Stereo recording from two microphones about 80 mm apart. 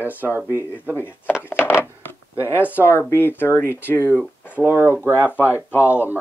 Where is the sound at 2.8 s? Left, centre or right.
Left.